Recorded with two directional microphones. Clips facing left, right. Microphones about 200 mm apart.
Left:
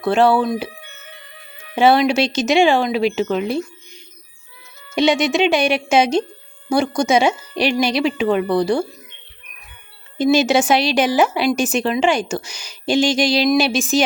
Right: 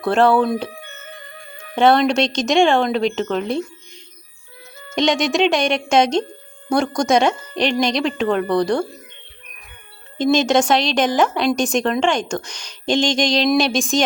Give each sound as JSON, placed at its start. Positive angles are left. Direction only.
{"t": 0.0, "sound": "speech", "side_deg": 0}
{"t": 0.7, "sound": "music", "side_deg": -50}
{"t": 1.7, "sound": "speech", "side_deg": 5}
{"t": 4.9, "sound": "speech", "side_deg": 5}
{"t": 10.2, "sound": "a woman's voice", "side_deg": 5}